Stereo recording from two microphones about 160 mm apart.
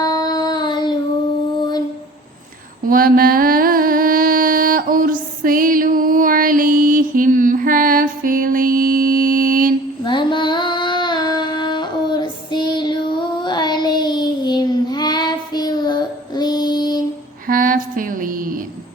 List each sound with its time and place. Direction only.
0.0 s child singing: 25° left (ahead or behind)
2.8 s mantra: 65° right (ahead or behind)
10.0 s child singing: 30° left (ahead or behind)
17.4 s a sound: 60° right (ahead or behind)